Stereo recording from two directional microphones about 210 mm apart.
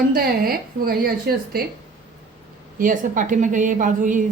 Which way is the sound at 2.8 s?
40° right (ahead or behind).